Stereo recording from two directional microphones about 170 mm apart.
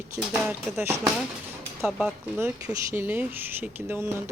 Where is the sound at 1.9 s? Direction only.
Centre (ahead or behind).